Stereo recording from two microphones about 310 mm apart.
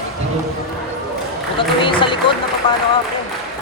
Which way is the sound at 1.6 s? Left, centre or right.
Centre.